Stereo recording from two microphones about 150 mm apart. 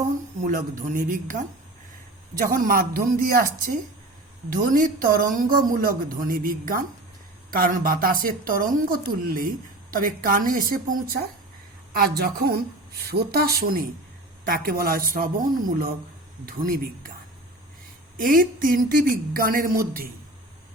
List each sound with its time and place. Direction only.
0.3 s a woman's voice: 60° right (ahead or behind)
18.2 s speech: 70° right (ahead or behind)